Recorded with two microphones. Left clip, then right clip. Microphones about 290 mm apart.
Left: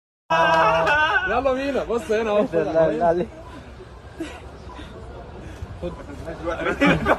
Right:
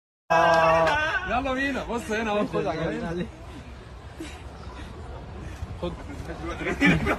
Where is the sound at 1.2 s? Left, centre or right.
Centre.